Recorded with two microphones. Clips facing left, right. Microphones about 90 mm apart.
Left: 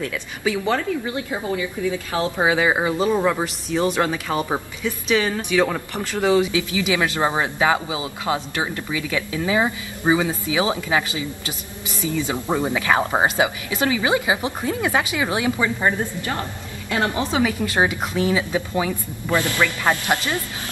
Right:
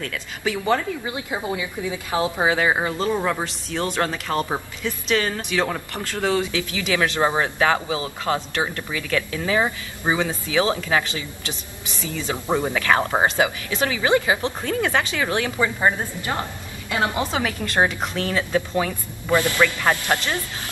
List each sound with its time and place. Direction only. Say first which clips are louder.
0.0 s speech: left 2 dB; 5° left (ahead or behind)
0.7 s a woman's voice: left 3 dB; 15° right (ahead or behind)
2.3 s speech: left 3 dB; 5° left (ahead or behind)
12.6 s speech: left 1 dB; 15° left (ahead or behind)
15.6 s a woman's voice: even; 20° right (ahead or behind)
17.3 s speech: left 4 dB; 5° left (ahead or behind)
19.2 s a woman's voice: right 2 dB; 20° right (ahead or behind)
19.8 s speech: left 1 dB; 15° left (ahead or behind)